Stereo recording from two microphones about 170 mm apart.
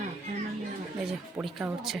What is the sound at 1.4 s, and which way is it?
Speech, 5° right (ahead or behind).